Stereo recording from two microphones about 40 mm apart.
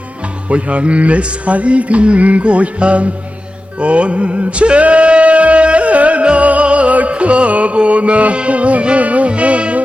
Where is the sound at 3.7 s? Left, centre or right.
Right.